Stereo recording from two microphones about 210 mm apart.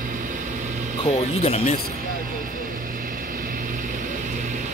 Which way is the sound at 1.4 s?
30° left (ahead or behind).